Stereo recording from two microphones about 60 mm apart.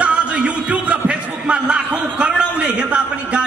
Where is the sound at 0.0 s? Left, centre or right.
Centre.